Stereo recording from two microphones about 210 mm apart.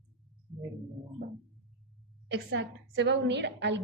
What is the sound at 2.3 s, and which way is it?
A woman's voice, 55° right (ahead or behind).